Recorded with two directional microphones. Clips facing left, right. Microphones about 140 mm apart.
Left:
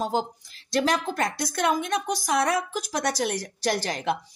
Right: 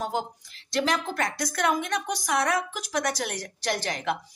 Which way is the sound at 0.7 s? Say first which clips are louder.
Left 2 dB; 40° left (ahead or behind).